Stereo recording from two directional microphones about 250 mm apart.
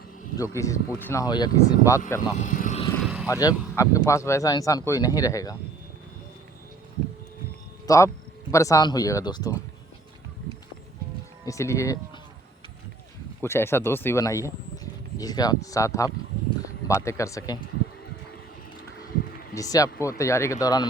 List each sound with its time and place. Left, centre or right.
0.3 s speech: centre
2.4 s vehicle: left
3.0 s vehicle: centre
3.2 s speech: centre
7.9 s speech: centre
11.4 s speech: centre
13.4 s speech: centre
19.0 s a sound: left
19.5 s speech: centre